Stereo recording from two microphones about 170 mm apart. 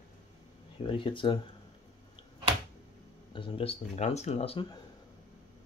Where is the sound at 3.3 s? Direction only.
30° left (ahead or behind).